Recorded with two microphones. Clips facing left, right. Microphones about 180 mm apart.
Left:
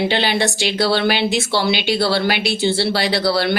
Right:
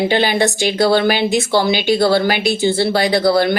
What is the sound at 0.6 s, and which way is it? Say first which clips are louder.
A woman's voice: right 6 dB; 45° right (ahead or behind).